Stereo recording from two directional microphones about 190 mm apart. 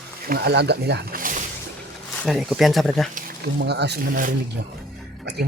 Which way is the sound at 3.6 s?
65° right (ahead or behind).